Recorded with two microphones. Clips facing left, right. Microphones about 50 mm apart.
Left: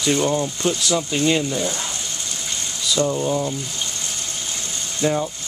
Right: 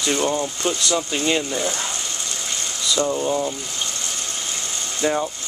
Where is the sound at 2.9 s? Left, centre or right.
Centre.